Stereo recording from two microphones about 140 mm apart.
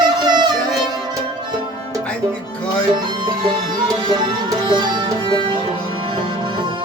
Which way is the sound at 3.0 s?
35° right (ahead or behind).